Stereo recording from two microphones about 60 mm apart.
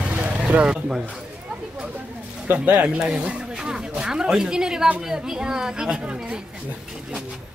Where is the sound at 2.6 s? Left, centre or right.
Right.